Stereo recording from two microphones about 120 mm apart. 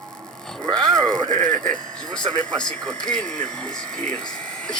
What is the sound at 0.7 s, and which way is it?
Speech, 5° left (ahead or behind).